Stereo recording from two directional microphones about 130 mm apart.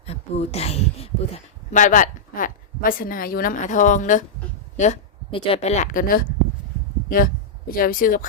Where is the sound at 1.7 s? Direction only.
85° left.